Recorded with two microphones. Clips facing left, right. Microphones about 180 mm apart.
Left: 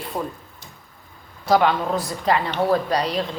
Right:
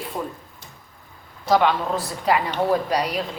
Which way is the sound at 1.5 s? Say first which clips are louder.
Left 1 dB; centre (ahead or behind).